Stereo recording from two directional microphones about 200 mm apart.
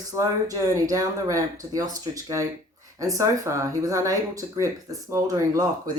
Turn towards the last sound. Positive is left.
turn(degrees=-15)  # may be behind; listen again after turning